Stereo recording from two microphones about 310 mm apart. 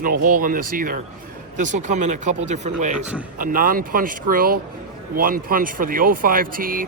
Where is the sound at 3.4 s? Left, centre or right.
Right.